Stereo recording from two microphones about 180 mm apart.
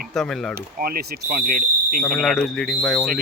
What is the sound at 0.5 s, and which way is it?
Speech, 55° right (ahead or behind).